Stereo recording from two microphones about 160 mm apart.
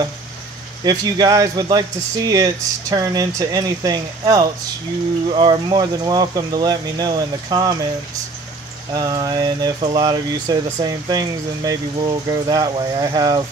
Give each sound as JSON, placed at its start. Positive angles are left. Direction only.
{"t": 0.8, "sound": "speech", "side_deg": -25}
{"t": 8.9, "sound": "speech", "side_deg": -25}